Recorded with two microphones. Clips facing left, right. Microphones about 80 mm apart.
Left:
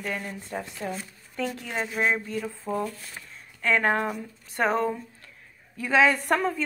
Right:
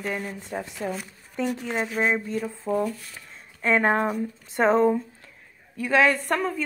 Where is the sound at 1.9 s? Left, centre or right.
Centre.